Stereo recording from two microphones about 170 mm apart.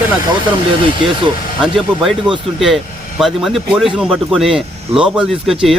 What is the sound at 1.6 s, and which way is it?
Speech, centre (ahead or behind).